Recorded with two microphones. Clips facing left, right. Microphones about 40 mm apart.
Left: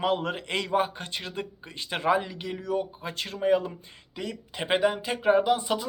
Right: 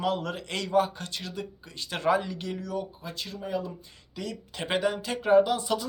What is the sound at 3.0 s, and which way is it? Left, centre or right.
Speech, left.